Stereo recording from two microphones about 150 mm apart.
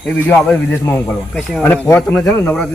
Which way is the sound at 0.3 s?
10° left (ahead or behind).